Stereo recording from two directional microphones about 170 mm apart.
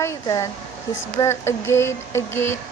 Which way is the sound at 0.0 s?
20° left (ahead or behind).